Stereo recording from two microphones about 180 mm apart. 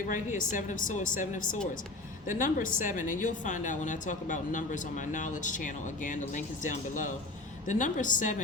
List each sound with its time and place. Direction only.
0.1 s a woman's voice: 45° left (ahead or behind)